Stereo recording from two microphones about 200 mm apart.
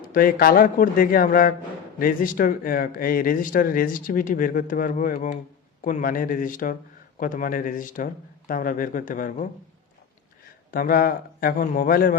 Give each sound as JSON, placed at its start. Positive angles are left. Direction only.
{"t": 0.0, "sound": "speech", "side_deg": 45}
{"t": 10.7, "sound": "speech", "side_deg": 45}